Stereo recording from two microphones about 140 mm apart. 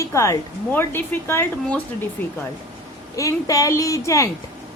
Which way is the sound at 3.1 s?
25° left (ahead or behind).